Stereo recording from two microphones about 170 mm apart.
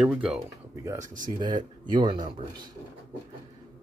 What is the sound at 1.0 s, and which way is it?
Speech, 50° right (ahead or behind).